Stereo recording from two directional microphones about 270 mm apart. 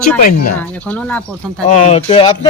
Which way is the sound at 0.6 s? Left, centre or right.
Centre.